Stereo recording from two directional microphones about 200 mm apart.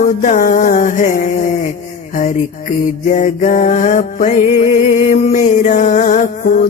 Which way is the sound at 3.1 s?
40° left (ahead or behind).